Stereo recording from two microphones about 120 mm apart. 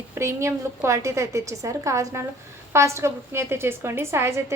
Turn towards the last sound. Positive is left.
turn(degrees=-20)  # may be behind; listen again after turning